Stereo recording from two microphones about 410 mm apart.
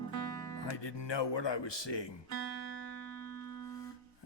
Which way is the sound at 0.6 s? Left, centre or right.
Left.